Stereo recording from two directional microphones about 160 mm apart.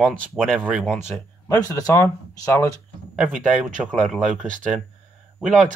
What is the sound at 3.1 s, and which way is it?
Speech, 10° right (ahead or behind).